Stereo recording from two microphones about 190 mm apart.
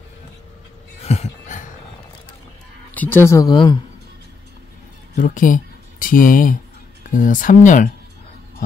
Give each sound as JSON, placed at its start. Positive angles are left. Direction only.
{"t": 1.0, "sound": "a sound", "side_deg": 35}
{"t": 2.9, "sound": "speech", "side_deg": 10}
{"t": 5.1, "sound": "speech", "side_deg": 45}